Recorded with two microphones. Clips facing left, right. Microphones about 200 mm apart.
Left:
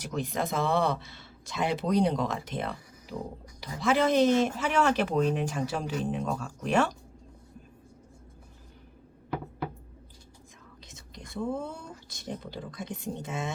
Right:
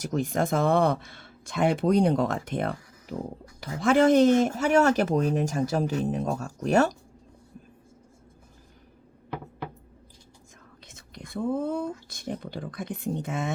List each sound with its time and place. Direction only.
0.1 s speech: 50° right (ahead or behind)
10.8 s speech: 55° right (ahead or behind)